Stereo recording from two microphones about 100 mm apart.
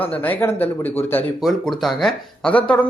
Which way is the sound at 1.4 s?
Centre (ahead or behind).